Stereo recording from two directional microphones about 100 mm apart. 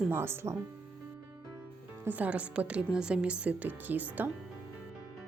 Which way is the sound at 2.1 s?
15° right (ahead or behind).